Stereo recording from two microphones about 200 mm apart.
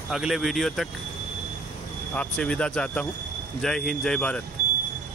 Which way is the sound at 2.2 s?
5° left (ahead or behind).